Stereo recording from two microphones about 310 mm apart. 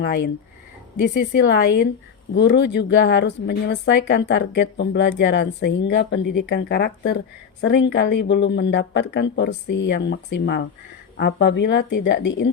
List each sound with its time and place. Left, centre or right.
0.0 s speech: left